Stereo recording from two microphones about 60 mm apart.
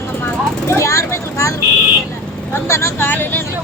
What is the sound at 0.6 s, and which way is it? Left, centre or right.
Vehicle, left.